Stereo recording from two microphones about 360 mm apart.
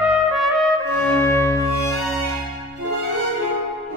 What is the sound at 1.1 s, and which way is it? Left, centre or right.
Music, centre.